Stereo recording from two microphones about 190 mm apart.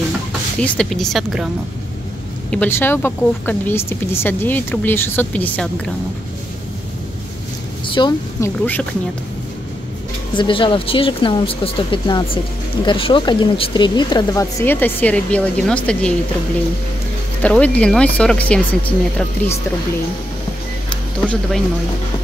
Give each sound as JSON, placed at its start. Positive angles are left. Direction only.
{"t": 0.6, "sound": "speech", "side_deg": 5}
{"t": 2.5, "sound": "speech", "side_deg": 10}
{"t": 7.9, "sound": "a woman's voice", "side_deg": 25}
{"t": 10.3, "sound": "speech", "side_deg": 25}
{"t": 17.4, "sound": "speech", "side_deg": 5}
{"t": 21.3, "sound": "speech", "side_deg": 0}